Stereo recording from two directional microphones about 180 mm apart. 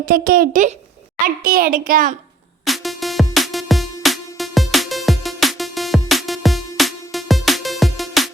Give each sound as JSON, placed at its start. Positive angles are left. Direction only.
{"t": 0.0, "sound": "a child's voice", "side_deg": -55}
{"t": 2.6, "sound": "music", "side_deg": 0}